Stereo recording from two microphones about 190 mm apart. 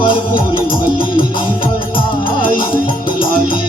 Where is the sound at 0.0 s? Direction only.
25° left (ahead or behind).